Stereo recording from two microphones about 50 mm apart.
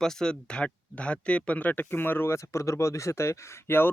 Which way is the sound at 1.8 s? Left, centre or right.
Left.